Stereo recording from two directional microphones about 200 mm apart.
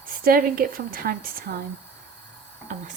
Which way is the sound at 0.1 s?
45° right (ahead or behind).